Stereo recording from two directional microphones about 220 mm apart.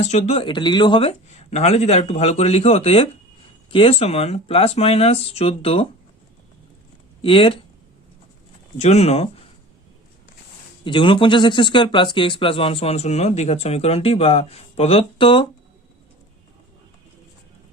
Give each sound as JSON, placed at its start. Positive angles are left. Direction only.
{"t": 0.0, "sound": "speech", "side_deg": 30}
{"t": 7.2, "sound": "speech", "side_deg": 25}
{"t": 8.8, "sound": "speech", "side_deg": 30}
{"t": 10.8, "sound": "speech", "side_deg": 20}